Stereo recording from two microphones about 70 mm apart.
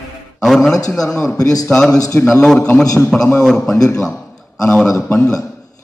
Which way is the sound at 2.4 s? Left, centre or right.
Centre.